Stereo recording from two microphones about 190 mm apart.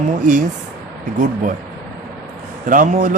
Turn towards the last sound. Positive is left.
turn(degrees=-45)  # may be behind; listen again after turning